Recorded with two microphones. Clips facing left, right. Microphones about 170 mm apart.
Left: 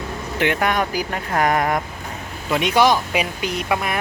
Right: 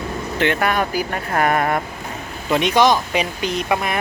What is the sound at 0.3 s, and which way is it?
Speech, 10° left (ahead or behind).